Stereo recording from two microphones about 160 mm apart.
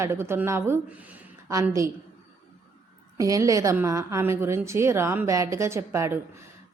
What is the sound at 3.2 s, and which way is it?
A woman's voice, 20° right (ahead or behind).